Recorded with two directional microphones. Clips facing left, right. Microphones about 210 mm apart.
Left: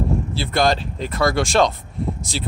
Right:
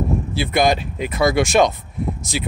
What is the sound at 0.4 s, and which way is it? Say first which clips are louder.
Speech: right 2 dB; 15° right (ahead or behind).